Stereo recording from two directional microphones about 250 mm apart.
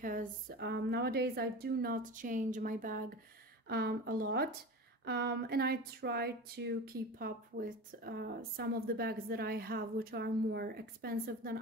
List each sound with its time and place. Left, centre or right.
0.0 s speech: right